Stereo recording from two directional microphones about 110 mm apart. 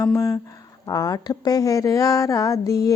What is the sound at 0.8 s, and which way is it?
A woman's voice, 35° left (ahead or behind).